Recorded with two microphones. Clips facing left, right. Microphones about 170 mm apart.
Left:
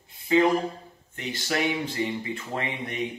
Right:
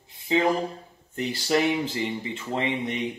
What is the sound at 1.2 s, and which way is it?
Speech, 35° right (ahead or behind).